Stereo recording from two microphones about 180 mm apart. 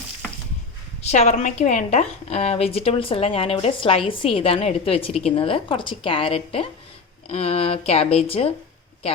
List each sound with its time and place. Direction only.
1.1 s a woman's voice: 40° left (ahead or behind)